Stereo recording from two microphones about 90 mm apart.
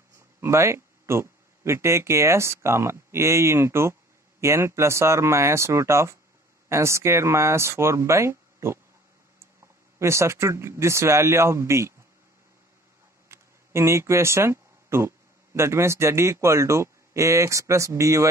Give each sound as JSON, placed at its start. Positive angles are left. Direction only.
{"t": 0.4, "sound": "speech", "side_deg": -30}
{"t": 9.9, "sound": "speech", "side_deg": -30}
{"t": 13.3, "sound": "speech", "side_deg": -30}